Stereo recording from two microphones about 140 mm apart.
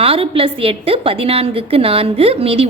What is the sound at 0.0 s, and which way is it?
A woman's voice, 40° right (ahead or behind).